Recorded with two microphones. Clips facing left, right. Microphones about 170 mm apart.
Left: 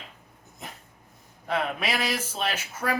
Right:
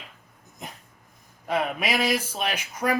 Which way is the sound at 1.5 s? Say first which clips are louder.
Right 2 dB; 10° right (ahead or behind).